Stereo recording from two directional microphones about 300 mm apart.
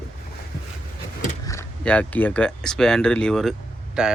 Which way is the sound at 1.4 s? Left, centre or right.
Centre.